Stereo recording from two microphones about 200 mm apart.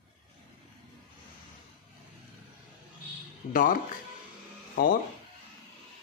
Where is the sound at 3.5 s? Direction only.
40° left (ahead or behind).